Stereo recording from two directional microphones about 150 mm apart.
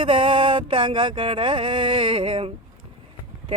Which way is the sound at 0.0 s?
35° right (ahead or behind).